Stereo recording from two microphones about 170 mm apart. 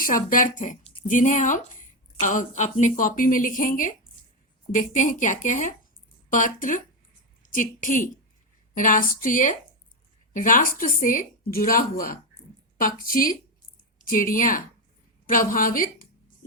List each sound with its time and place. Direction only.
0.0 s a woman's voice: 55° left (ahead or behind)